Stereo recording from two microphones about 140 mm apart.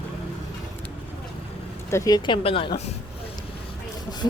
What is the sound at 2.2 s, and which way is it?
Speech, 40° left (ahead or behind).